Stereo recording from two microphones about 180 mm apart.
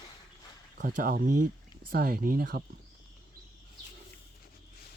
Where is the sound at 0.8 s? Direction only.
50° right (ahead or behind).